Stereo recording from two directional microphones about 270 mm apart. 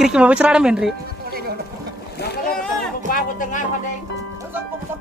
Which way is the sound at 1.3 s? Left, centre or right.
Right.